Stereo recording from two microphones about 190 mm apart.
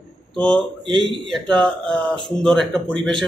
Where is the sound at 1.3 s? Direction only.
5° left (ahead or behind).